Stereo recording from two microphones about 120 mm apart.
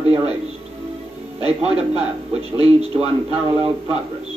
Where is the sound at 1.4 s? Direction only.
55° right (ahead or behind).